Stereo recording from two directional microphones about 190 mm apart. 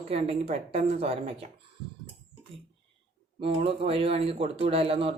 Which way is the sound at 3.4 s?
30° right (ahead or behind).